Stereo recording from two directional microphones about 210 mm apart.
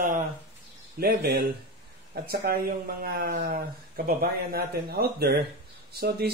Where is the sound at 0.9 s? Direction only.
50° right (ahead or behind).